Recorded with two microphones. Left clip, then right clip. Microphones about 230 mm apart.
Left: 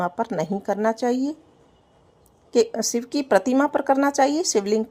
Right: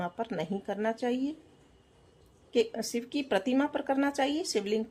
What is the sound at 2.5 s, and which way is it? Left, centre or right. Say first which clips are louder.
Speech: left 9 dB; left.